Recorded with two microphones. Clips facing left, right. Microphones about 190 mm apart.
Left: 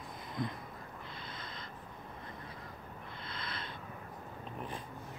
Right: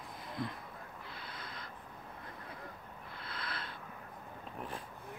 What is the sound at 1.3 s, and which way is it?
Owl, 10° right (ahead or behind).